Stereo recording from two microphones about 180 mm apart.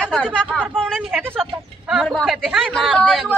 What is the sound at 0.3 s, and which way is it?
A man's voice, 5° left (ahead or behind).